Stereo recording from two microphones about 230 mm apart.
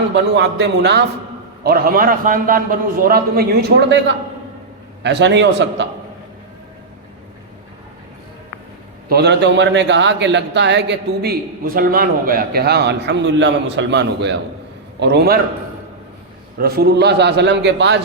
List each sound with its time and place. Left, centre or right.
0.1 s a man's voice: right
9.0 s a man's voice: right
16.6 s a man's voice: right